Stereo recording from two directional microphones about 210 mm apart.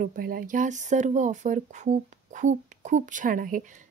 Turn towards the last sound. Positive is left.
turn(degrees=-40)  # may be behind; listen again after turning